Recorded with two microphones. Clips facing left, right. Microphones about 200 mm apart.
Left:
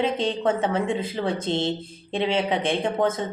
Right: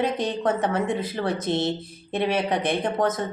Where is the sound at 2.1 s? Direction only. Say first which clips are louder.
Even; 25° left (ahead or behind).